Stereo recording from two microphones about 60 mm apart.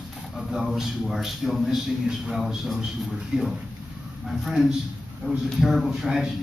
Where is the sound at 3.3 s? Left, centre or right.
Centre.